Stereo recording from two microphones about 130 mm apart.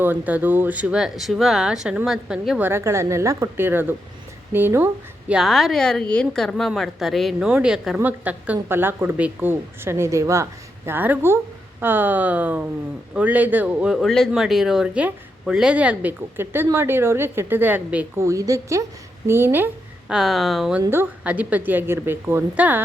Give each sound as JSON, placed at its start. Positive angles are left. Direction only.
{"t": 0.0, "sound": "a woman's voice", "side_deg": -15}
{"t": 2.6, "sound": "a woman's voice", "side_deg": -15}
{"t": 5.3, "sound": "a woman's voice", "side_deg": 0}
{"t": 13.9, "sound": "a woman's voice", "side_deg": 0}
{"t": 20.1, "sound": "a woman's voice", "side_deg": 0}
{"t": 20.9, "sound": "a woman's voice", "side_deg": -15}